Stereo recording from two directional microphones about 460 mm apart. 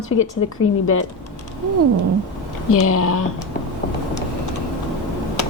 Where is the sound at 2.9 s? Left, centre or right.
Left.